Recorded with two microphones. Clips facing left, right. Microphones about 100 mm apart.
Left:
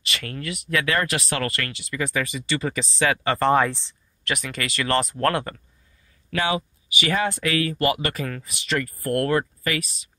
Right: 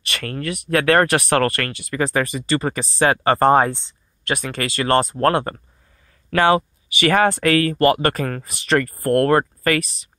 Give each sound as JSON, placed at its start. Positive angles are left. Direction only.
{"t": 0.1, "sound": "speech", "side_deg": -45}
{"t": 6.3, "sound": "speech", "side_deg": -55}